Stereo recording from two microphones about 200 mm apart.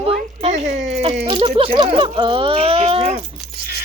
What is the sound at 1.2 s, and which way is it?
Speech, 30° right (ahead or behind).